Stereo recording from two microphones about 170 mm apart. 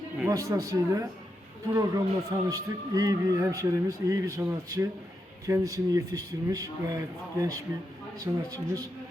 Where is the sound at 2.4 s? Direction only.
20° right (ahead or behind).